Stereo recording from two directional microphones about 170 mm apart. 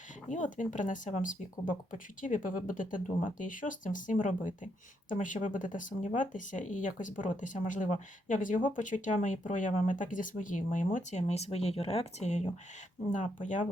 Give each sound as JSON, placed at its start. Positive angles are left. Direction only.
{"t": 0.3, "sound": "speech", "side_deg": 50}